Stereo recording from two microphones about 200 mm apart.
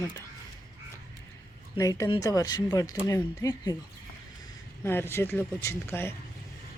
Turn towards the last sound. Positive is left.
turn(degrees=10)  # may be behind; listen again after turning